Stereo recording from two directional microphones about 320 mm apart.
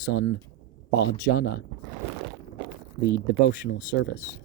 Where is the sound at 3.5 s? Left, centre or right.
Left.